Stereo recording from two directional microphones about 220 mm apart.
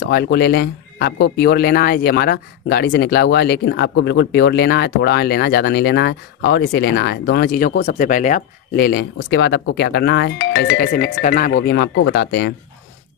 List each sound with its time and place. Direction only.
0.0 s speech: 45° left (ahead or behind)
11.5 s speech: 50° left (ahead or behind)